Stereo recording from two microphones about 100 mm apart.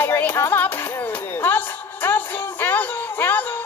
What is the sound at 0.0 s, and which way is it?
Music, 20° left (ahead or behind).